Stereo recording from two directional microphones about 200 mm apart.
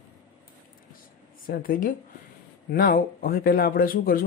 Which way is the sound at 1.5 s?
45° left (ahead or behind).